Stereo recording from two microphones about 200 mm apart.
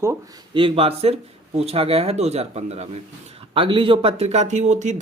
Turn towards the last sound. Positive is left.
turn(degrees=-35)  # may be behind; listen again after turning